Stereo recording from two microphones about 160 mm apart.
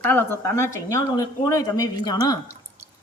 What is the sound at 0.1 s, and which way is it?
Speech, 15° left (ahead or behind).